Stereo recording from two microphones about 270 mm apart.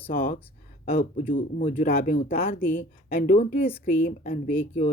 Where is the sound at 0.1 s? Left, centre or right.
Left.